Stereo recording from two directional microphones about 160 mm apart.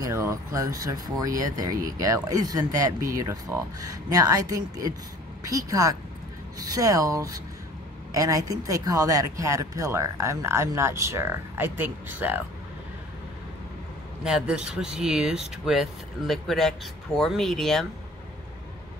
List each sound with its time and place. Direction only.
0.0 s speech: 20° right (ahead or behind)
14.2 s speech: 5° right (ahead or behind)